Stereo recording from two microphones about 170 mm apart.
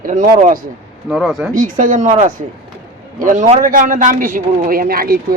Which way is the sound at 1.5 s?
50° right (ahead or behind).